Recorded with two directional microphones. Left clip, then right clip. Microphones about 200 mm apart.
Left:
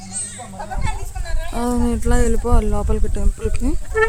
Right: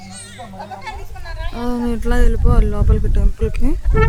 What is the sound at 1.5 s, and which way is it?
Speech, 15° left (ahead or behind).